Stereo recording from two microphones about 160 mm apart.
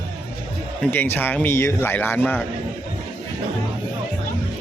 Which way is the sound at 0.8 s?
10° left (ahead or behind).